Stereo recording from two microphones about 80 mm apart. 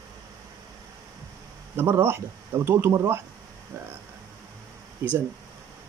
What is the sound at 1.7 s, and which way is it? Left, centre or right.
Speech, right.